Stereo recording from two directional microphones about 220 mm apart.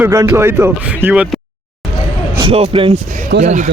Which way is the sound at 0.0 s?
10° right (ahead or behind).